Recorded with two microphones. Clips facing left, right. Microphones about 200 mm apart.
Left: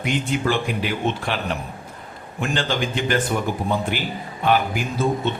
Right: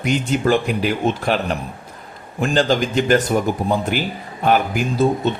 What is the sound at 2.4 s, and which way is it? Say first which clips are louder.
A man's voice: right 6 dB; 35° right (ahead or behind).